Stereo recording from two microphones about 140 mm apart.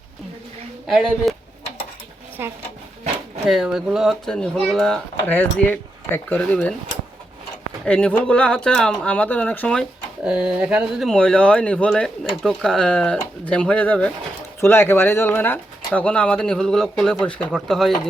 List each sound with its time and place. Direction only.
0.9 s speech: centre (ahead or behind)
2.4 s speech: 15° right (ahead or behind)
3.4 s speech: centre (ahead or behind)
7.9 s speech: 5° left (ahead or behind)
10.2 s speech: 10° right (ahead or behind)